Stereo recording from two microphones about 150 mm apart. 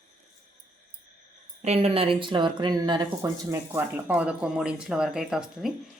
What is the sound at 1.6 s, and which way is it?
Speech, 40° right (ahead or behind).